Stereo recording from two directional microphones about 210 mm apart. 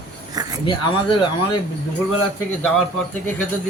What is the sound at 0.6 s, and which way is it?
Speech, 20° left (ahead or behind).